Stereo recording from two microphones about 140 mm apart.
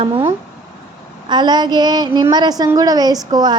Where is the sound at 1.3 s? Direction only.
30° right (ahead or behind).